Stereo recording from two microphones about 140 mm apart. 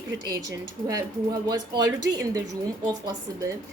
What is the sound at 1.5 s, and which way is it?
Speech, 30° right (ahead or behind).